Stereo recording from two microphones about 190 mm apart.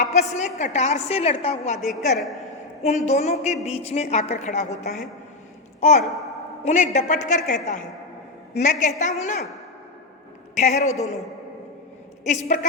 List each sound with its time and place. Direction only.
0.0 s a woman's voice: 40° left (ahead or behind)
1.8 s a woman's voice: centre (ahead or behind)
2.8 s a woman's voice: 35° left (ahead or behind)
6.0 s a woman's voice: centre (ahead or behind)
6.7 s a woman's voice: 40° left (ahead or behind)
10.6 s a woman's voice: 35° left (ahead or behind)
12.2 s a woman's voice: 40° left (ahead or behind)